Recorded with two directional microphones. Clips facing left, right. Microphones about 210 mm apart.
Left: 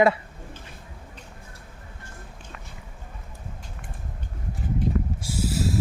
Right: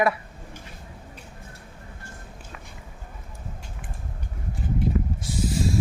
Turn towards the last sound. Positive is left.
turn(degrees=5)  # may be behind; listen again after turning